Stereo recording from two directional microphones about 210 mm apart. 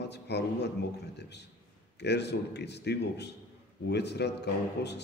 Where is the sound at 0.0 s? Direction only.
55° left (ahead or behind).